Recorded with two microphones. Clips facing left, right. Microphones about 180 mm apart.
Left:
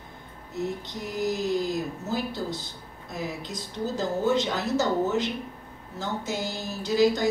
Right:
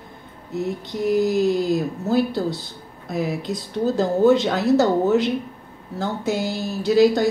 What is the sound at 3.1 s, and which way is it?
A woman's voice, 65° right (ahead or behind).